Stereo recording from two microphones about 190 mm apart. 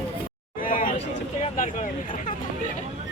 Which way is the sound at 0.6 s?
45° left (ahead or behind).